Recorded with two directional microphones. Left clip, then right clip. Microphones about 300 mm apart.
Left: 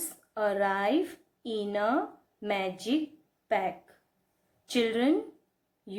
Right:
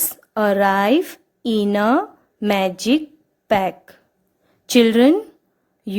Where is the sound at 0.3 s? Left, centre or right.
Right.